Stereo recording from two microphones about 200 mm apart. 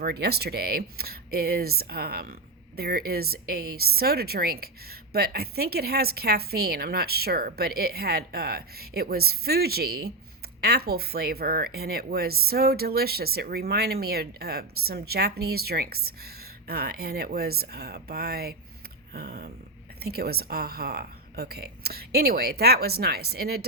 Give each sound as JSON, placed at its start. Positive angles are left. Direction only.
{"t": 0.0, "sound": "speech", "side_deg": -50}